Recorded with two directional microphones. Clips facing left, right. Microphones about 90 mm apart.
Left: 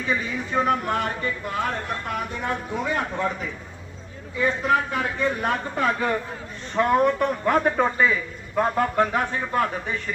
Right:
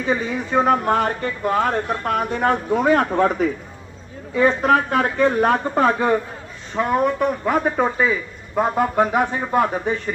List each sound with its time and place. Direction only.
0.0 s a man's voice: 35° right (ahead or behind); by 5.5 s 55° right (ahead or behind)
5.5 s speech: 35° right (ahead or behind)
6.7 s a man's voice: 5° right (ahead or behind); by 10.0 s 25° right (ahead or behind)